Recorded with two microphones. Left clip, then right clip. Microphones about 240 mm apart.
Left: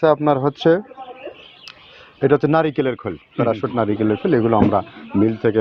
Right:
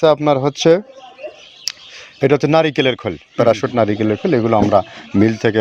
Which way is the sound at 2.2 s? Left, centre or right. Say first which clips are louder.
Right 3 dB; right.